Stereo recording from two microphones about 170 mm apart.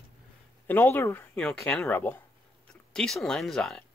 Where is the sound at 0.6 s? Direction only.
10° left (ahead or behind).